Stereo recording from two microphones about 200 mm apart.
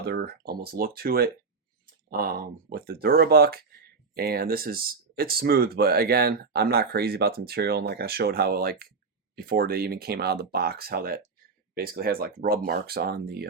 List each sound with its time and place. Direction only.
0.0 s speech: 55° right (ahead or behind)